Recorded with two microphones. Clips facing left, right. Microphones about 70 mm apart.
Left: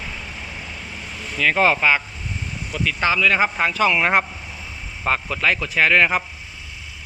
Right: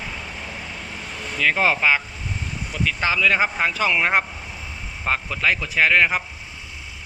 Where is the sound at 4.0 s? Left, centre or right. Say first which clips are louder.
Right 1 dB; centre.